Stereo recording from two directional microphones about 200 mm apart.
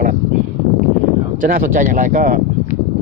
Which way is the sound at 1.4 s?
45° right (ahead or behind).